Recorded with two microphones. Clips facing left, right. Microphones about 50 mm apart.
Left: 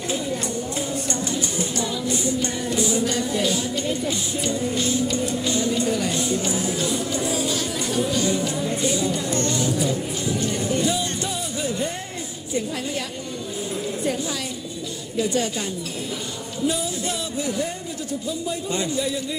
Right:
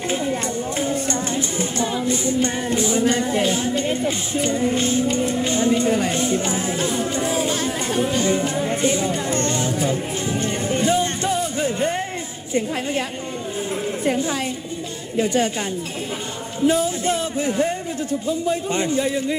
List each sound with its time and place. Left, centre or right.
0.1 s a sound: right
0.8 s music: right
14.0 s a man's voice: right
16.6 s a man's voice: right